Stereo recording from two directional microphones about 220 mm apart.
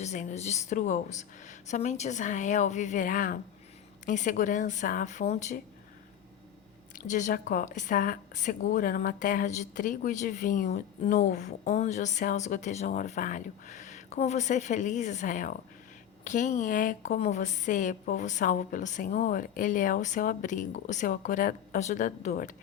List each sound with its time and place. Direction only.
0.0 s a woman's voice: 30° left (ahead or behind)
7.1 s a woman's voice: 35° left (ahead or behind)